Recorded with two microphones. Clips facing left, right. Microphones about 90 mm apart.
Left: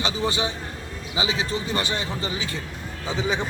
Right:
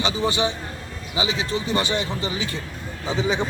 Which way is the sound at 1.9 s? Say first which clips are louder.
Right 3 dB; 40° left (ahead or behind).